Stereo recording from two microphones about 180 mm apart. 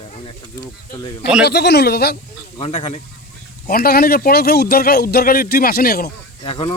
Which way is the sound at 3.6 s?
55° left (ahead or behind).